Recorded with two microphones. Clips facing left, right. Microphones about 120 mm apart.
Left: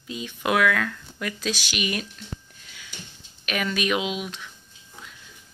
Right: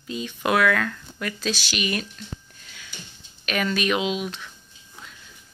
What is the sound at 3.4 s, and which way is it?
Speech, 10° left (ahead or behind).